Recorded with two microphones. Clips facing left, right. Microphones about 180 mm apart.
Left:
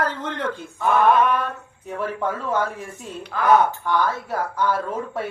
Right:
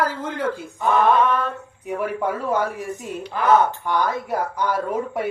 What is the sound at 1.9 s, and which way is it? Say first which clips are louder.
Speech: right 2 dB; 15° right (ahead or behind).